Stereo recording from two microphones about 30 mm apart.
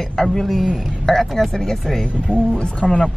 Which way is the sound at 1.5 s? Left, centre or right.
Centre.